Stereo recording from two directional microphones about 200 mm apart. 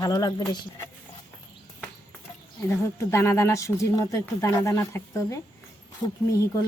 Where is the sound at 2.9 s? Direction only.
15° left (ahead or behind).